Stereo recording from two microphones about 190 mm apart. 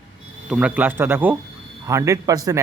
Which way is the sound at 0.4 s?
5° right (ahead or behind).